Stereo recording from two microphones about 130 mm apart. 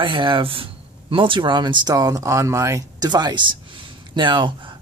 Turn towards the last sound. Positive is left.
turn(degrees=-40)  # may be behind; listen again after turning